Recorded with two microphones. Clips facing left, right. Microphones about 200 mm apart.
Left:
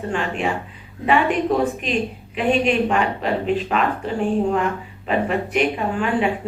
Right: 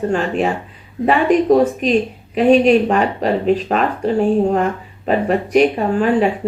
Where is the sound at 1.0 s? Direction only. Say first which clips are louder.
Right 5 dB; 40° right (ahead or behind).